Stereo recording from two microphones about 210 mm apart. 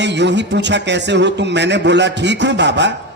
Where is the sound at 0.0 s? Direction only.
55° right (ahead or behind).